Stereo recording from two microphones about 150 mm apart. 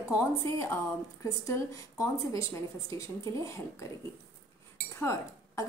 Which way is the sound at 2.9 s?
20° left (ahead or behind).